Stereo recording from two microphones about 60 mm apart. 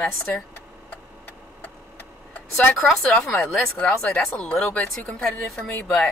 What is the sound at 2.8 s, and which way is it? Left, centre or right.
Speech, centre.